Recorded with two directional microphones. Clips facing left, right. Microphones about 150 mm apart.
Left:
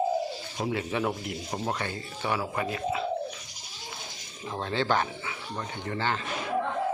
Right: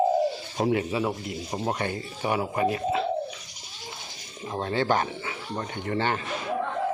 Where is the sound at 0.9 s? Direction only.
5° right (ahead or behind).